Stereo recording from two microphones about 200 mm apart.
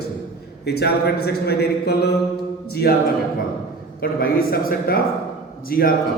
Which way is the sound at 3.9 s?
45° left (ahead or behind).